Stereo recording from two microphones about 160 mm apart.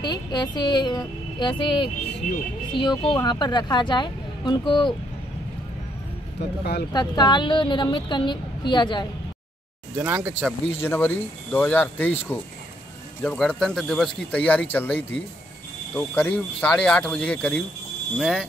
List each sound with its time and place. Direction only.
0.0 s speech: 25° left (ahead or behind)
2.2 s speech: 55° left (ahead or behind)
2.7 s speech: 30° left (ahead or behind)
6.6 s speech: 90° left
6.9 s speech: 25° left (ahead or behind)
9.9 s speech: 15° right (ahead or behind)
10.8 s speech: 15° left (ahead or behind)
13.2 s speech: 10° left (ahead or behind)